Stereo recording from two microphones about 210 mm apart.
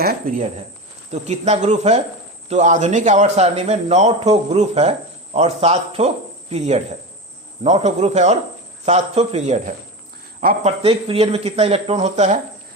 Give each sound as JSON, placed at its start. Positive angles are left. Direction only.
{"t": 0.0, "sound": "speech", "side_deg": -45}
{"t": 1.1, "sound": "speech", "side_deg": -30}